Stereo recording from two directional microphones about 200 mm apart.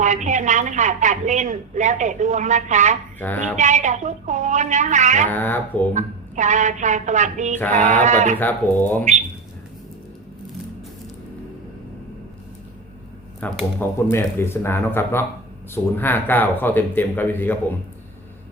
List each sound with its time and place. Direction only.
0.0 s a woman's voice: 35° right (ahead or behind)
3.2 s speech: 10° left (ahead or behind)
3.6 s a woman's voice: 35° right (ahead or behind)
5.3 s speech: 10° left (ahead or behind)
5.9 s a woman's voice: 35° right (ahead or behind)
7.6 s speech: 10° left (ahead or behind)
8.0 s a woman's voice: 40° right (ahead or behind)
8.4 s speech: 10° left (ahead or behind)
13.4 s speech: 10° left (ahead or behind)